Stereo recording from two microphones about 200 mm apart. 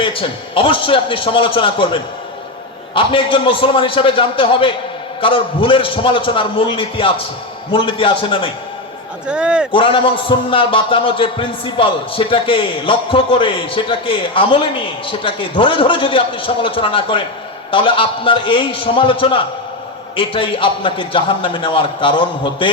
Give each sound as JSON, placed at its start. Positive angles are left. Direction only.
{"t": 0.0, "sound": "a man's voice", "side_deg": 25}
{"t": 9.2, "sound": "a man's voice", "side_deg": -5}
{"t": 9.7, "sound": "a man's voice", "side_deg": 25}